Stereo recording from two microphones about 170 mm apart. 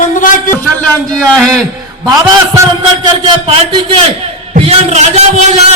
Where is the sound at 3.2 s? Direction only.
30° right (ahead or behind).